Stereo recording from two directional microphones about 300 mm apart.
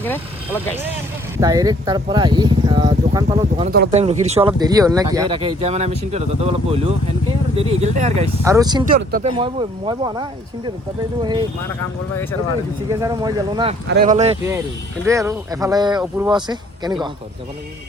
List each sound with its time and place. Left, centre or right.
0.0 s speech: centre
1.4 s speech: centre
3.7 s speech: right; by 8.9 s centre
8.9 s speech: right
9.4 s speech: centre
12.9 s speech: centre
13.8 s speech: right
15.0 s speech: centre